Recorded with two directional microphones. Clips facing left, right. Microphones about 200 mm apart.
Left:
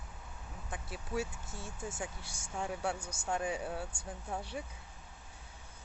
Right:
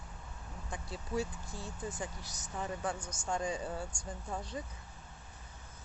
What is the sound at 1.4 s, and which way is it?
Speech, 25° left (ahead or behind).